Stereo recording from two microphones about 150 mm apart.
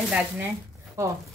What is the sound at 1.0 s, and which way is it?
Speech, 20° right (ahead or behind).